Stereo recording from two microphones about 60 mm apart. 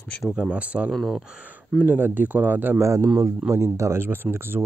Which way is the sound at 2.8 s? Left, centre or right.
Right.